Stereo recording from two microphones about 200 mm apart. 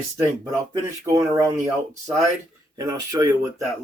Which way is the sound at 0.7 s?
15° right (ahead or behind).